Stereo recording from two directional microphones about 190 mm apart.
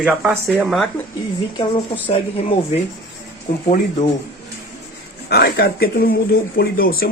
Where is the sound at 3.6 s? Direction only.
40° left (ahead or behind).